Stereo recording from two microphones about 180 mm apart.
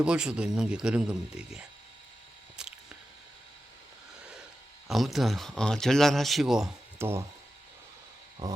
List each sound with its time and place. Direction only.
0.0 s speech: 5° right (ahead or behind)
2.6 s a sound: 5° right (ahead or behind)
4.9 s speech: centre (ahead or behind)
8.4 s speech: 20° right (ahead or behind)